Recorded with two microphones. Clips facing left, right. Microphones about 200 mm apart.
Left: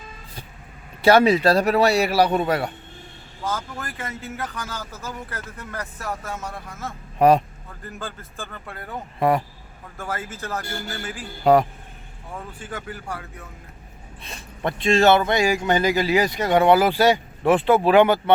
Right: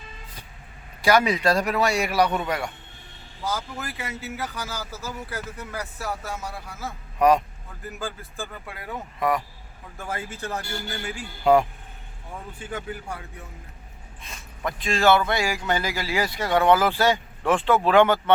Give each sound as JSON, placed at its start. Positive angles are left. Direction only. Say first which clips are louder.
{"t": 1.0, "sound": "a man's voice", "louder": "left 5 dB", "side_deg": 30}
{"t": 3.4, "sound": "a man's voice", "louder": "left 1 dB", "side_deg": -10}
{"t": 7.2, "sound": "a man's voice", "louder": "left 3 dB", "side_deg": 30}
{"t": 7.9, "sound": "a man's voice", "louder": "right 2 dB", "side_deg": -10}
{"t": 9.1, "sound": "a man's voice", "louder": "left 4 dB", "side_deg": 30}
{"t": 10.2, "sound": "speech", "louder": "left 1 dB", "side_deg": -20}
{"t": 11.5, "sound": "a man's voice", "louder": "left 2 dB", "side_deg": 40}
{"t": 12.7, "sound": "speech", "louder": "even", "side_deg": -20}
{"t": 14.8, "sound": "speech", "louder": "left 4 dB", "side_deg": 25}